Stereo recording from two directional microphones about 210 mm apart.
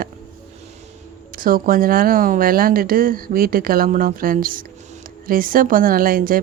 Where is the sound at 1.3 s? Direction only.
40° right (ahead or behind).